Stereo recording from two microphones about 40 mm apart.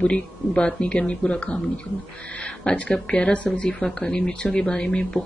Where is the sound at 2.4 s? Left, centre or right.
Left.